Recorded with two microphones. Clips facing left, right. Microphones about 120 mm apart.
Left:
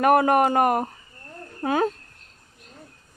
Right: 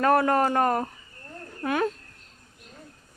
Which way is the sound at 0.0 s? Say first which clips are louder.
Left 3 dB; 20° left (ahead or behind).